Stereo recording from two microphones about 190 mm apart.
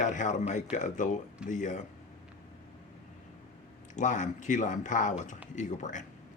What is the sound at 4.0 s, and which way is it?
A man's voice, 40° left (ahead or behind).